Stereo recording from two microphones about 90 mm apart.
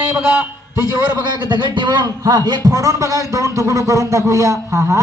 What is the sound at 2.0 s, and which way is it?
A man's voice, 40° right (ahead or behind).